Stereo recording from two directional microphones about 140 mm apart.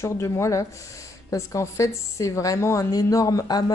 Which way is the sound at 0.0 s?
20° left (ahead or behind).